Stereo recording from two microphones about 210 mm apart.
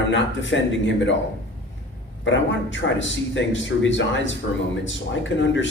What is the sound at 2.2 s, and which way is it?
Speech, 60° left (ahead or behind).